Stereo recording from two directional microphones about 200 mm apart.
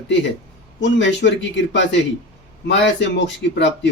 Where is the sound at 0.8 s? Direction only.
65° left (ahead or behind).